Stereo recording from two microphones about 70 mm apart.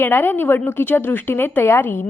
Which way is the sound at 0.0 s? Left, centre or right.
Left.